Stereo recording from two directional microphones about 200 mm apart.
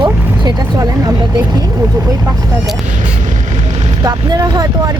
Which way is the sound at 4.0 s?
20° right (ahead or behind).